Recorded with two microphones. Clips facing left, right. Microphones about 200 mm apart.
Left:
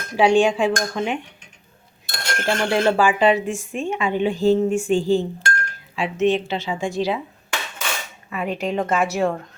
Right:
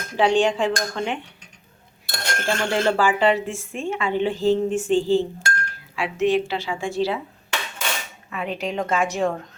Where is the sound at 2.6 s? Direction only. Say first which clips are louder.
Left 2 dB; 15° left (ahead or behind).